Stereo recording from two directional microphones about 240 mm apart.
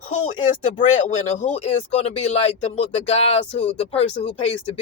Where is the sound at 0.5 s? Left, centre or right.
Left.